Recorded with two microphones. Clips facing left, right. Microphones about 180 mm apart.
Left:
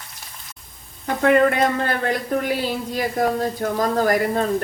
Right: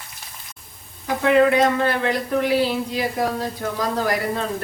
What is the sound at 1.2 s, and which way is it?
Speech, 50° left (ahead or behind).